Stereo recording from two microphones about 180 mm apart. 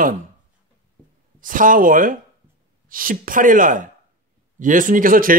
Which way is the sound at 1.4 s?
50° right (ahead or behind).